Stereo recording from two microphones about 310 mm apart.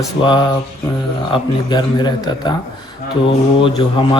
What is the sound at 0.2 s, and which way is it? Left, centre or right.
Speech, centre.